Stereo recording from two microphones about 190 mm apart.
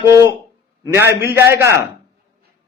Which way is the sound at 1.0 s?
60° left (ahead or behind).